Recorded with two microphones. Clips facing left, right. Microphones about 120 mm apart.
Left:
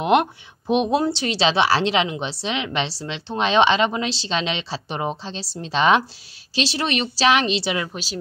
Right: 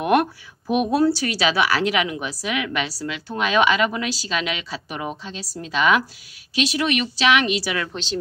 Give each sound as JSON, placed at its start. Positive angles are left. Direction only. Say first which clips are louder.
{"t": 0.0, "sound": "a woman's voice", "louder": "left 1 dB", "side_deg": 20}
{"t": 7.9, "sound": "a woman's voice", "louder": "right 3 dB", "side_deg": 10}